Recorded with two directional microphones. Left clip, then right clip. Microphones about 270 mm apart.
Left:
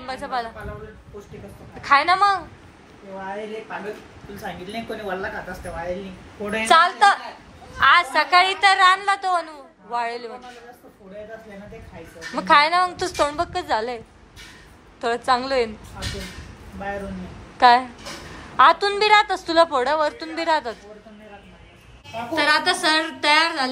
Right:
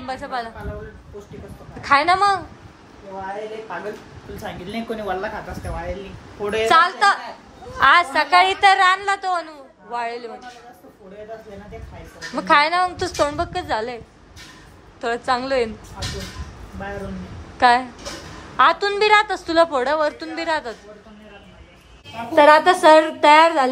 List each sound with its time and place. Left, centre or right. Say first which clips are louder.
0.0 s a woman's voice: even; centre
1.9 s a woman's voice: right 1 dB; centre
6.6 s a woman's voice: even; centre
12.4 s a woman's voice: even; centre
17.6 s a woman's voice: left 1 dB; centre
22.3 s a woman's voice: right 7 dB; centre